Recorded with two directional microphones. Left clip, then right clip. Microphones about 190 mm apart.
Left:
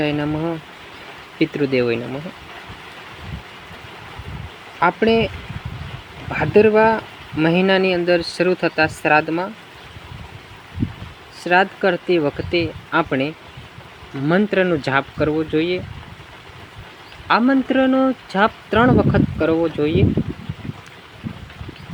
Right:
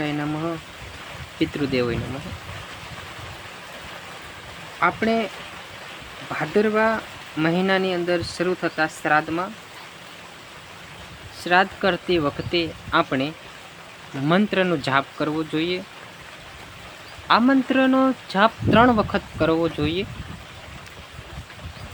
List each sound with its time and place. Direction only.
0.0 s speech: 10° left (ahead or behind)
4.8 s speech: 15° left (ahead or behind)
6.3 s speech: 15° left (ahead or behind)
11.4 s speech: 5° left (ahead or behind)
17.2 s speech: 5° left (ahead or behind)